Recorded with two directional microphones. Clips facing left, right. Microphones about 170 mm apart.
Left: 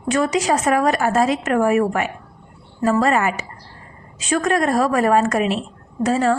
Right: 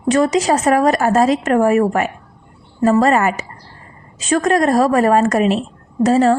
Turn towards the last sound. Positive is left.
turn(degrees=-40)  # may be behind; listen again after turning